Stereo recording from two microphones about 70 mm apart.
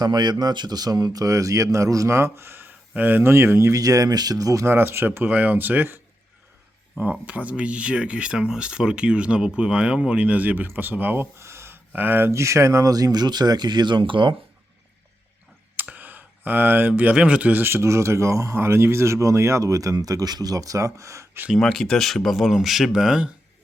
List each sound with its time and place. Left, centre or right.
0.0 s speech: right
1.2 s speech: right
3.3 s speech: right
3.7 s speech: right
4.6 s speech: right
7.0 s speech: centre
11.3 s a sound: right
11.9 s speech: right
12.3 s speech: right
15.7 s a sound: right
17.5 s speech: right
21.6 s speech: centre